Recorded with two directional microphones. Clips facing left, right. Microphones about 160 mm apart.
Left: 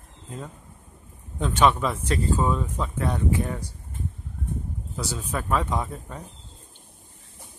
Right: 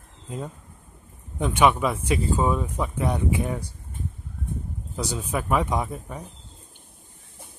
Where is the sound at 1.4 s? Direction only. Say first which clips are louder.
Right 1 dB; 10° right (ahead or behind).